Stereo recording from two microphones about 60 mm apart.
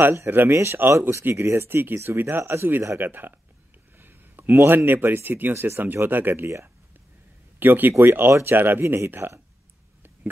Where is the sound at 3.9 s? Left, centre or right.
Right.